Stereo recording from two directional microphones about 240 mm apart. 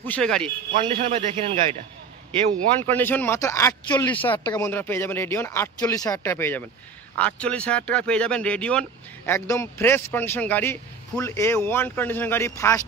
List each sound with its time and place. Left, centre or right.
0.0 s speech: centre
0.7 s a man's voice: right
2.8 s speech: centre